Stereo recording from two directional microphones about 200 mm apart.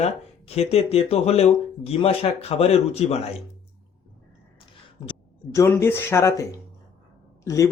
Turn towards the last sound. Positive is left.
turn(degrees=15)  # may be behind; listen again after turning